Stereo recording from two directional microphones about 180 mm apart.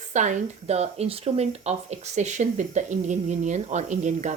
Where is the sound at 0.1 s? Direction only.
40° right (ahead or behind).